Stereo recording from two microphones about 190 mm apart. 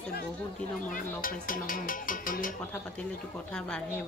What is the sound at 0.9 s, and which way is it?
Speech, 45° left (ahead or behind).